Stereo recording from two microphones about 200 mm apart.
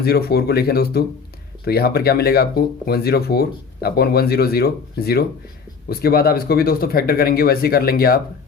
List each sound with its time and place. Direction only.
0.0 s speech: 50° left (ahead or behind)